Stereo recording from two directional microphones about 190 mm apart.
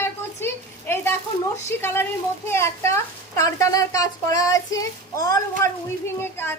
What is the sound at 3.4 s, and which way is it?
Child singing, 20° left (ahead or behind).